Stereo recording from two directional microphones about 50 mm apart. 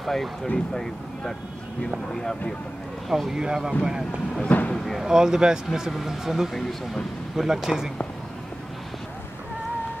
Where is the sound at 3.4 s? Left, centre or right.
Centre.